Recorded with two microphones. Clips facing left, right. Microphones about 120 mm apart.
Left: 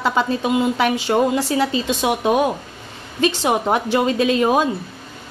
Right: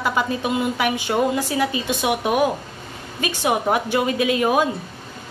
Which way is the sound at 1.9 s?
20° left (ahead or behind).